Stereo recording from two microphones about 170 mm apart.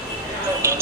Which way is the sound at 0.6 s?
15° right (ahead or behind).